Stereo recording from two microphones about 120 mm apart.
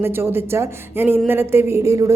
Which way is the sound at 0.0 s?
20° right (ahead or behind).